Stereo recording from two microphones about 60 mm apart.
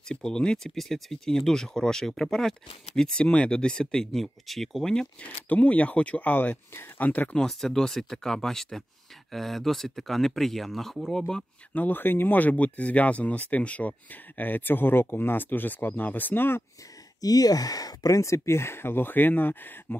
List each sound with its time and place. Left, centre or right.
0.1 s speech: centre
5.2 s speech: left
6.7 s speech: left
7.3 s speech: centre
11.7 s speech: left
17.2 s speech: left